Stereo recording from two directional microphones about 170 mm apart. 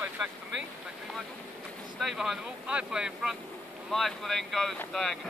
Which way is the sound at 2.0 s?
Centre (ahead or behind).